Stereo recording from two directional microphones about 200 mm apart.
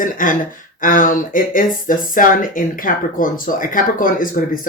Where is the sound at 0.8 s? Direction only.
40° left (ahead or behind).